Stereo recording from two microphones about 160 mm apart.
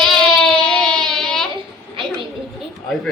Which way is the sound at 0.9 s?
5° left (ahead or behind).